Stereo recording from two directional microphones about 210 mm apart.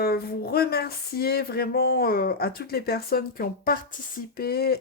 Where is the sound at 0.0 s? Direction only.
45° left (ahead or behind).